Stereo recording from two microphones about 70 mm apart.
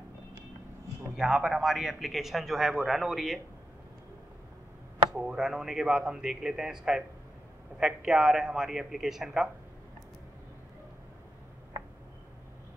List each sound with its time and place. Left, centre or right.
1.1 s a man's voice: centre
5.2 s a man's voice: centre